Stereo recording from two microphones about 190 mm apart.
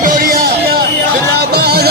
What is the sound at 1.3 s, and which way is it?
Music, 60° right (ahead or behind).